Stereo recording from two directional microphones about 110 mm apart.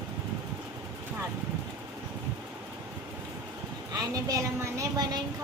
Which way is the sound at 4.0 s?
35° right (ahead or behind).